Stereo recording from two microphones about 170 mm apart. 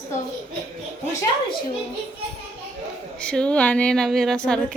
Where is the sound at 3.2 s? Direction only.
5° left (ahead or behind).